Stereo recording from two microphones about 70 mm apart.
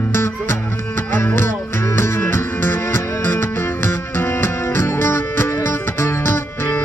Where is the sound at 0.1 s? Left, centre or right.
Left.